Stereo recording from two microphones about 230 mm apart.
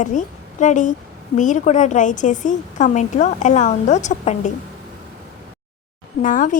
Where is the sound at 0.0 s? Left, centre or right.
Left.